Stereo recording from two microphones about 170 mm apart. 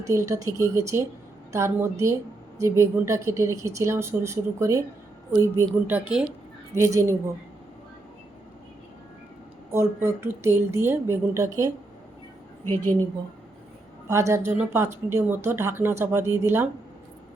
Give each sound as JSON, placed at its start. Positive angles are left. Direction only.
{"t": 0.0, "sound": "speech", "side_deg": -15}
{"t": 9.7, "sound": "speech", "side_deg": -15}
{"t": 12.6, "sound": "a woman's voice", "side_deg": 10}
{"t": 14.1, "sound": "speech", "side_deg": -15}